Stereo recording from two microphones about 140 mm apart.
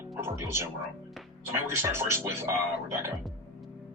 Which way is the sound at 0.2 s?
20° right (ahead or behind).